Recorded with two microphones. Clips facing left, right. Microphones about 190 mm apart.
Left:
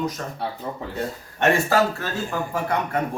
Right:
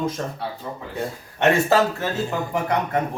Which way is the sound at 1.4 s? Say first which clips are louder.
Right 2 dB; 20° right (ahead or behind).